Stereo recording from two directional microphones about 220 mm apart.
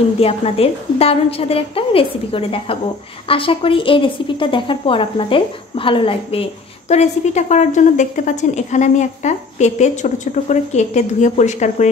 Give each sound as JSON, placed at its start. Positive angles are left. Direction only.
{"t": 0.2, "sound": "a woman's voice", "side_deg": 25}